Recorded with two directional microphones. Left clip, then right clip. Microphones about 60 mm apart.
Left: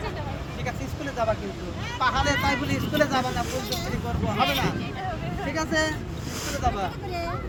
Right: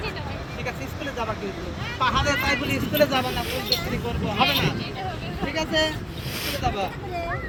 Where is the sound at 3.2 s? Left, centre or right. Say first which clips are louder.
Right 3 dB; left.